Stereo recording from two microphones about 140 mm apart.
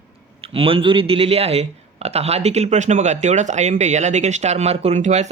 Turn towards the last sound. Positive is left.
turn(degrees=-55)  # may be behind; listen again after turning